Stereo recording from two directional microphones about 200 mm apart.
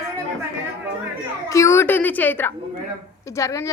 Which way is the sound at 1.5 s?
15° left (ahead or behind).